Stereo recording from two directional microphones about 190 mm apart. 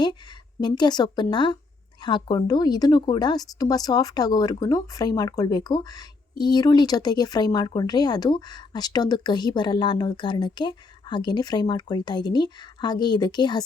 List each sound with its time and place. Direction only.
0.6 s speech: 20° left (ahead or behind)